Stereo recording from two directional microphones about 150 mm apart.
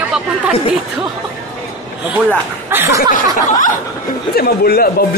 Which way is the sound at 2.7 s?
15° right (ahead or behind).